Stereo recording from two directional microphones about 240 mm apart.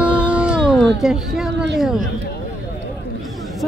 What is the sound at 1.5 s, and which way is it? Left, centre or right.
Speech, right.